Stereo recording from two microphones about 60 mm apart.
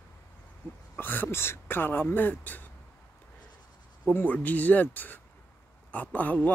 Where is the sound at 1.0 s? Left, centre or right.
Left.